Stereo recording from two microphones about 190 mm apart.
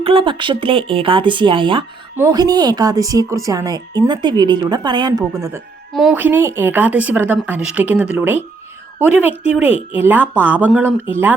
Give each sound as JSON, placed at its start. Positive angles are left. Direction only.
{"t": 0.0, "sound": "speech", "side_deg": -30}
{"t": 5.9, "sound": "speech", "side_deg": 0}
{"t": 6.1, "sound": "speech", "side_deg": -10}